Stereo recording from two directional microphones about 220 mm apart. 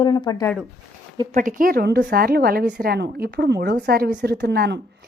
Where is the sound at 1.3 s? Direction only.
40° right (ahead or behind).